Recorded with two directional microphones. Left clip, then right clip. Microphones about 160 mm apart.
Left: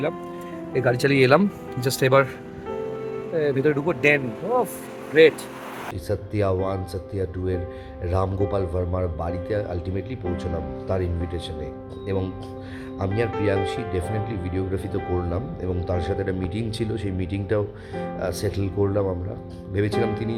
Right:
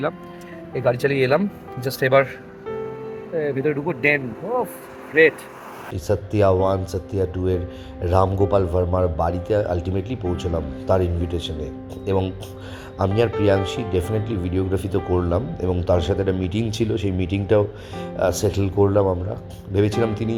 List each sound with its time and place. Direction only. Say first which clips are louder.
0.9 s speech: left 4 dB; 30° left (ahead or behind)
1.8 s speech: right 1 dB; 20° left (ahead or behind)
3.3 s speech: left 1 dB; 15° left (ahead or behind)
6.1 s speech: right 6 dB; 5° right (ahead or behind)